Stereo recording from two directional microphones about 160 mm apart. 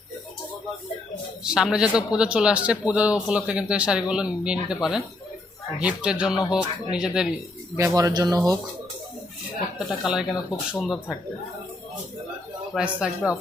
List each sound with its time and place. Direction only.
1.5 s speech: 5° right (ahead or behind)
7.8 s speech: 20° right (ahead or behind)
9.7 s speech: 5° right (ahead or behind)
12.7 s speech: 5° right (ahead or behind)